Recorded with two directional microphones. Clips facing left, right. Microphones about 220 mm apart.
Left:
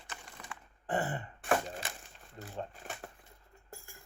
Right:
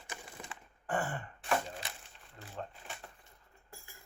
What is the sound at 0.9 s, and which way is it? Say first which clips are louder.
Throat clearing: left 2 dB; 20° left (ahead or behind).